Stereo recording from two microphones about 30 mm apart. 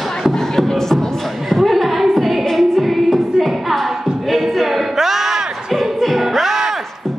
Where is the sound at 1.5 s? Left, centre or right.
Centre.